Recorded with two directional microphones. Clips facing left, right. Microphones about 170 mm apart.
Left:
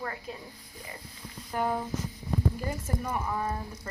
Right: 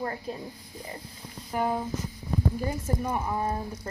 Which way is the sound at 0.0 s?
35° right (ahead or behind).